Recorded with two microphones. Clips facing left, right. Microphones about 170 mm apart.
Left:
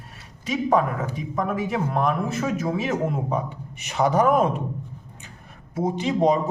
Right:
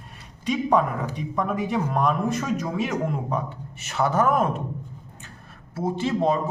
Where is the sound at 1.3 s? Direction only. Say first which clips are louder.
Even; centre (ahead or behind).